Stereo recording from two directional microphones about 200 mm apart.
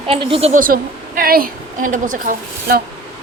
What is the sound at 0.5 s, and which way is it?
A woman's voice, 45° right (ahead or behind).